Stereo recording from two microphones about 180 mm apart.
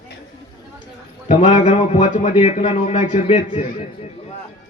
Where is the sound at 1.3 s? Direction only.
45° left (ahead or behind).